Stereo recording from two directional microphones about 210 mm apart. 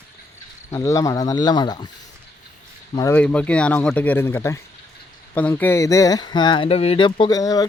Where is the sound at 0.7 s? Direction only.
15° left (ahead or behind).